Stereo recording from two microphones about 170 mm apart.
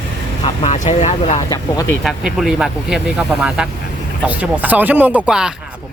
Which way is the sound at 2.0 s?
Centre (ahead or behind).